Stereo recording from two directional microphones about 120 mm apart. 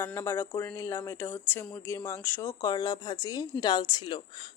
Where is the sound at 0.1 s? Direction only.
20° left (ahead or behind).